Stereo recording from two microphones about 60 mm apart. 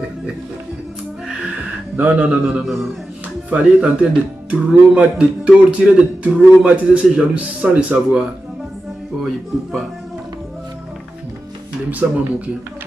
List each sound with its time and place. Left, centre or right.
2.0 s a man's voice: right
2.6 s speech: centre
3.4 s a man's voice: right
7.6 s a man's voice: right
9.2 s speech: centre
12.0 s a man's voice: right